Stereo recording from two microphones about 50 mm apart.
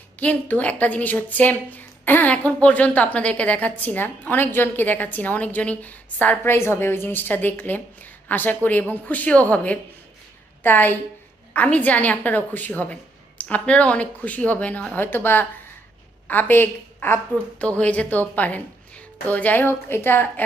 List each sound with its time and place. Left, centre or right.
0.2 s a woman's voice: left
6.4 s a woman's voice: left
10.6 s a woman's voice: left
11.5 s a woman's voice: left
14.9 s a woman's voice: left
17.7 s a woman's voice: left
19.6 s a woman's voice: left